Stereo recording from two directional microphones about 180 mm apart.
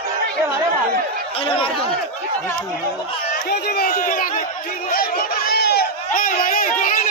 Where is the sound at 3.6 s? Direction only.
55° left (ahead or behind).